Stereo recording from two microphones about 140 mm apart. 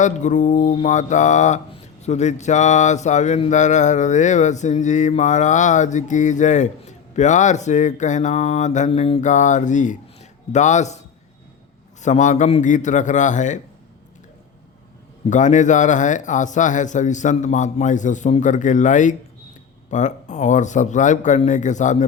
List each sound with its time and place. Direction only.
0.0 s speech: 60° left (ahead or behind)
8.9 s mantra: 45° left (ahead or behind)
9.2 s a man's voice: 60° left (ahead or behind)
12.0 s speech: 60° left (ahead or behind)
15.3 s speech: 60° left (ahead or behind)